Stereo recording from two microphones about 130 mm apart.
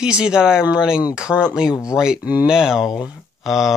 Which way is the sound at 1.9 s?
5° right (ahead or behind).